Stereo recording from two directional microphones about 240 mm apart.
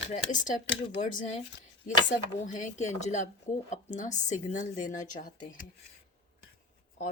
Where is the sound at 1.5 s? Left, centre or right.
Left.